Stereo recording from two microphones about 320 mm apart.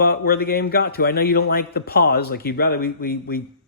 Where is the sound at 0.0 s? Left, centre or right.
Left.